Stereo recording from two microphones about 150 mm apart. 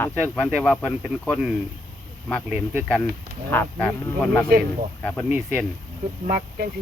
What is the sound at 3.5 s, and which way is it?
Speech, 10° left (ahead or behind).